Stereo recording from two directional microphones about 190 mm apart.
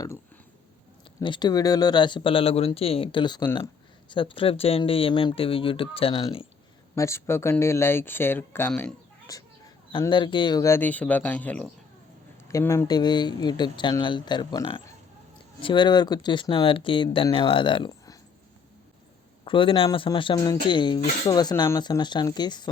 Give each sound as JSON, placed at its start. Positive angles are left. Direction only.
{"t": 1.2, "sound": "speech", "side_deg": 25}
{"t": 6.9, "sound": "speech", "side_deg": 15}
{"t": 9.9, "sound": "speech", "side_deg": 25}
{"t": 19.5, "sound": "speech", "side_deg": 25}